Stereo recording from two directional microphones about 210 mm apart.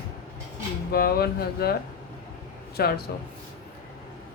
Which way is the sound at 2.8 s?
50° left (ahead or behind).